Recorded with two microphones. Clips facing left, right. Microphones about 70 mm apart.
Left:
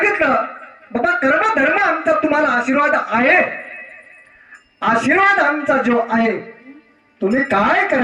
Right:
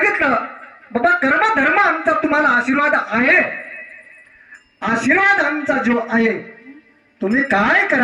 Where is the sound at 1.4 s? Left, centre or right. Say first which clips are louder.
Right 1 dB; right; by 3.9 s centre.